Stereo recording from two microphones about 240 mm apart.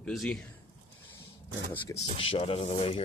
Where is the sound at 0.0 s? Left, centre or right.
Centre.